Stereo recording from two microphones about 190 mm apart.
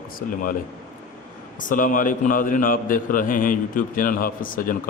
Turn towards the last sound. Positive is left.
turn(degrees=50)  # may be behind; listen again after turning